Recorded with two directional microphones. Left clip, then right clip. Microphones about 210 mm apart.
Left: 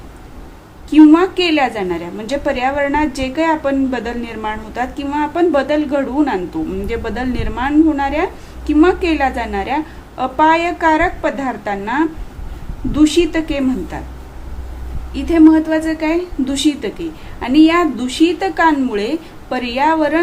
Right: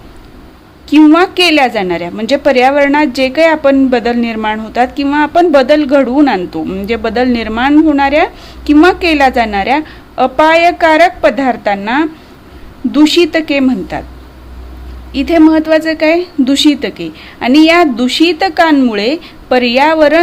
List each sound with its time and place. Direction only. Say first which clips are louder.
0.9 s a woman's voice: right 3 dB; 50° right (ahead or behind)
15.1 s a woman's voice: right 3 dB; 50° right (ahead or behind)